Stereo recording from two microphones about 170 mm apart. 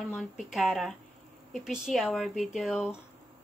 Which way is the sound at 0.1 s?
Centre (ahead or behind).